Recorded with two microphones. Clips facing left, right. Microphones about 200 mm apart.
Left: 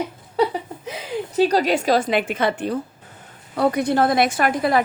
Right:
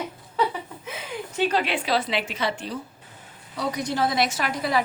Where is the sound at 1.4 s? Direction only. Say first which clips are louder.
Left 6 dB; 40° left (ahead or behind).